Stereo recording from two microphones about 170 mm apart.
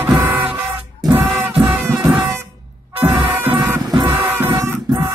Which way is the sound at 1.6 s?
15° right (ahead or behind).